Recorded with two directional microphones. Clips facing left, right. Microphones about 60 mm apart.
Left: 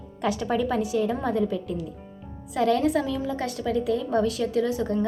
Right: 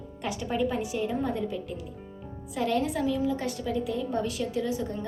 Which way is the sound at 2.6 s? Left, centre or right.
Left.